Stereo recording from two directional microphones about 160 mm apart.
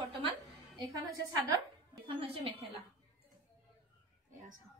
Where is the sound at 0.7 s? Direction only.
25° right (ahead or behind).